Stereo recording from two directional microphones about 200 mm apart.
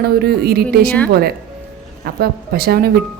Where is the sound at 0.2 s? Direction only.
50° right (ahead or behind).